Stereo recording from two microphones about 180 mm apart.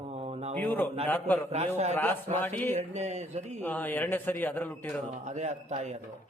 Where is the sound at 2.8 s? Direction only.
40° right (ahead or behind).